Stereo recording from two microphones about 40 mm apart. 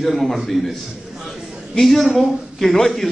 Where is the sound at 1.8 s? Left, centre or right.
Centre.